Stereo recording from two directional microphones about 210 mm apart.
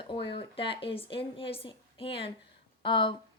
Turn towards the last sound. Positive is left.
turn(degrees=25)  # may be behind; listen again after turning